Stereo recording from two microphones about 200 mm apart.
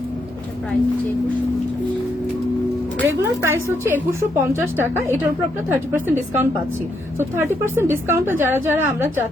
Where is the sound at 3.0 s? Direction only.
10° right (ahead or behind).